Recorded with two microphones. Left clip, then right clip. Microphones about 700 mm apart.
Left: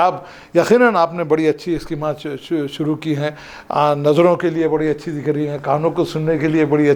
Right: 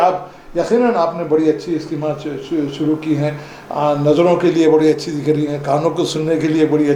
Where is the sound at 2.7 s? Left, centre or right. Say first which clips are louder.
Right 3 dB; left.